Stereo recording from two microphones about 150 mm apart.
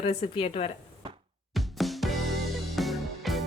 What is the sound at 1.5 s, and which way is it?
Music, centre (ahead or behind).